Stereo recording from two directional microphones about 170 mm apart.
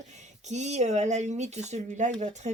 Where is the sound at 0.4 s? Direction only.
45° right (ahead or behind).